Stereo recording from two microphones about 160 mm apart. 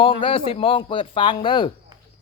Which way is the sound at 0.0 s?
35° left (ahead or behind).